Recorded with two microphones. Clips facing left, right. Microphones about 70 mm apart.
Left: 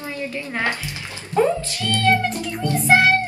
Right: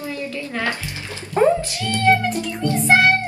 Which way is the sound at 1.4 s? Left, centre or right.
Right.